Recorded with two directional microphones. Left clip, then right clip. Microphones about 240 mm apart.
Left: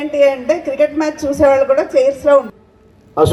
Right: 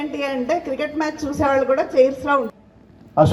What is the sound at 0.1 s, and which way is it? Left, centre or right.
A woman's voice, left.